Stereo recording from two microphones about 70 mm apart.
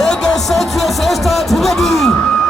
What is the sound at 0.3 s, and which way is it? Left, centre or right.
Music, centre.